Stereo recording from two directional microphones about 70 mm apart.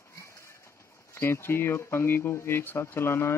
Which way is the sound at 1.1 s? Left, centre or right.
Left.